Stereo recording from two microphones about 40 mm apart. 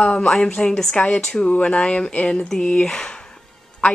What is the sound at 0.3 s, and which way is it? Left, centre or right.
Speech, left.